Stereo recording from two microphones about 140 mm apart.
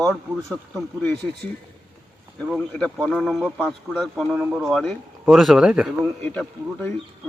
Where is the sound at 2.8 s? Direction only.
5° left (ahead or behind).